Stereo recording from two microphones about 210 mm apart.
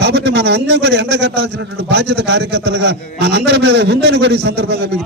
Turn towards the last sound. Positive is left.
turn(degrees=-50)  # may be behind; listen again after turning